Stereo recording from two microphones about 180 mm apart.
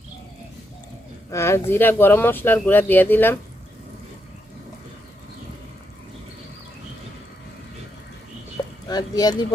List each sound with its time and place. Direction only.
1.3 s speech: 15° left (ahead or behind)
8.9 s speech: 20° left (ahead or behind)